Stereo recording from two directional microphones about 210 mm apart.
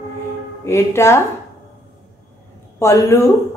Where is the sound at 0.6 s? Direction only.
10° left (ahead or behind).